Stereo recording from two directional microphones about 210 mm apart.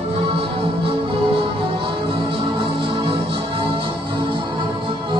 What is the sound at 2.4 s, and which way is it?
Music, 25° right (ahead or behind).